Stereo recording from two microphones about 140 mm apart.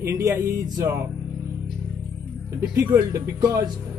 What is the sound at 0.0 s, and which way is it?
Speech, 20° right (ahead or behind).